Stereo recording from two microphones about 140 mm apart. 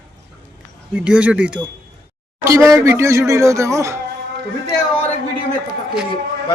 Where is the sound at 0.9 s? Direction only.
10° right (ahead or behind).